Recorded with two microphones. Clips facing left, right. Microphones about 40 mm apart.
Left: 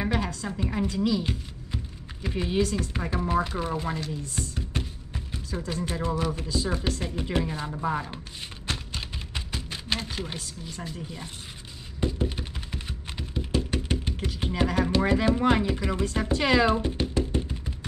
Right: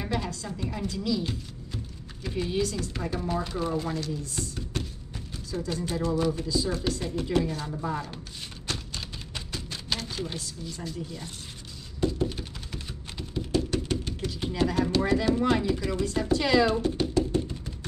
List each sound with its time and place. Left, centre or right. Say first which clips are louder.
0.0 s speech: left 3 dB; left
8.6 s music: left 2 dB; left
12.0 s typing: right 1 dB; left